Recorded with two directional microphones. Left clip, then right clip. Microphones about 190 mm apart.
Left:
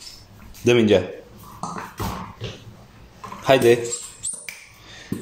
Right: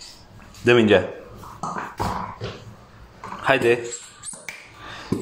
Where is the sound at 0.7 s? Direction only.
20° left (ahead or behind).